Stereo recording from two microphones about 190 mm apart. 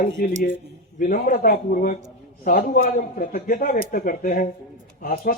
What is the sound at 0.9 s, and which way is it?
A man's voice, 45° left (ahead or behind).